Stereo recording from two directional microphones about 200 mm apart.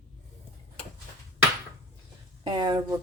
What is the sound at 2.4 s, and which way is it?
Speech, 20° right (ahead or behind).